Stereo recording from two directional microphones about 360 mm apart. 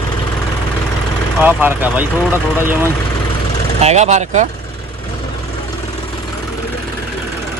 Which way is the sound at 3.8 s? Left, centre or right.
Centre.